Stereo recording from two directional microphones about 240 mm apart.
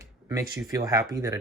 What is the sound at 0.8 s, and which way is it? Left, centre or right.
Speech, centre.